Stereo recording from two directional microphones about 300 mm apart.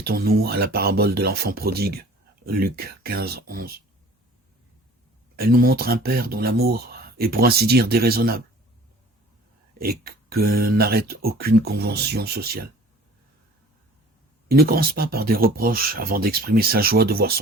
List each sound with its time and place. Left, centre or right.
0.0 s speech: right
5.4 s speech: right
9.7 s speech: right
14.4 s speech: right